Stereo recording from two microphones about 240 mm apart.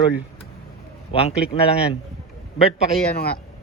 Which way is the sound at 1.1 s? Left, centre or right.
Left.